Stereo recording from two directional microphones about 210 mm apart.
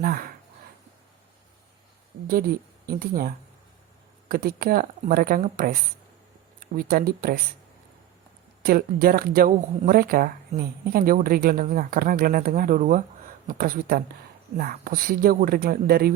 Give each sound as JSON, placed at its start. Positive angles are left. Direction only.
{"t": 0.0, "sound": "speech", "side_deg": -45}
{"t": 2.8, "sound": "speech", "side_deg": -40}
{"t": 6.7, "sound": "speech", "side_deg": -45}
{"t": 8.6, "sound": "speech", "side_deg": -45}